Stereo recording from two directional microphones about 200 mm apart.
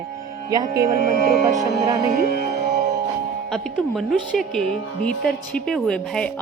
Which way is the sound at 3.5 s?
Centre (ahead or behind).